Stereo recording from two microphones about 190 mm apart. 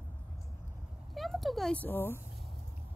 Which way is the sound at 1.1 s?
Centre (ahead or behind).